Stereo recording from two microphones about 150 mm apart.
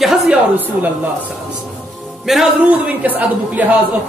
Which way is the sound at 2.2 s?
5° right (ahead or behind).